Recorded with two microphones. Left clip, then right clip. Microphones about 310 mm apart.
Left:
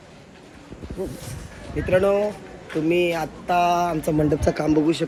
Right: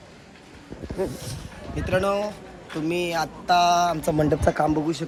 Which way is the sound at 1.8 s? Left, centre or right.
Centre.